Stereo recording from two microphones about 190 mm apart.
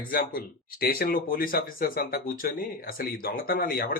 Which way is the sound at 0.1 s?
50° left (ahead or behind).